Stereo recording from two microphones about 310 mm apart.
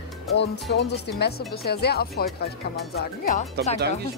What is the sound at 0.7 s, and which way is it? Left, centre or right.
A woman's voice, left.